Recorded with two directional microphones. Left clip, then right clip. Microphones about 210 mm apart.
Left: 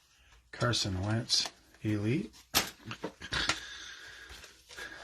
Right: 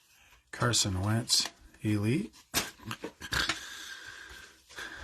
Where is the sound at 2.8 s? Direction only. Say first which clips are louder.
Right 2 dB; 20° right (ahead or behind).